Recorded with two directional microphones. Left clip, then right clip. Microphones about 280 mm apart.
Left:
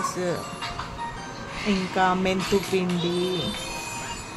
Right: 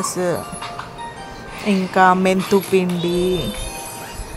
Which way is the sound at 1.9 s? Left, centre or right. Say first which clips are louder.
Right 9 dB; centre.